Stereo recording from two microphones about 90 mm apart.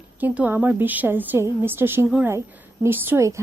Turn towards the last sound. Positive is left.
turn(degrees=-25)  # may be behind; listen again after turning